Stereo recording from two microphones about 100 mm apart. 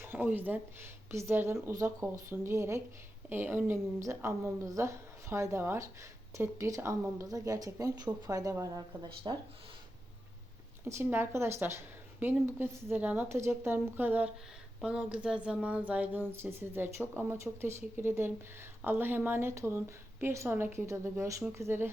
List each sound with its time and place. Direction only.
0.0 s speech: 15° right (ahead or behind); by 8.8 s 35° right (ahead or behind)
9.2 s speech: 50° right (ahead or behind)
10.8 s speech: 25° right (ahead or behind)